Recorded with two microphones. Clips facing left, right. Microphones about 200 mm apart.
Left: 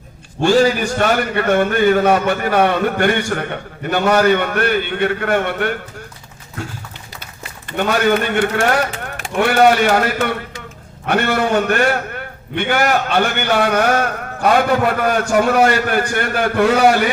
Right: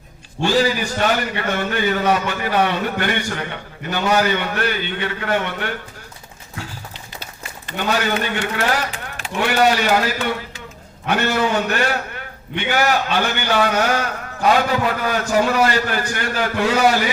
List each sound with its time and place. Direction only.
0.4 s a man's voice: 50° left (ahead or behind)
7.8 s a man's voice: 50° left (ahead or behind)